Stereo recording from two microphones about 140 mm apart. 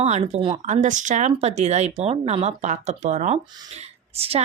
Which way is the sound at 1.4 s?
50° right (ahead or behind).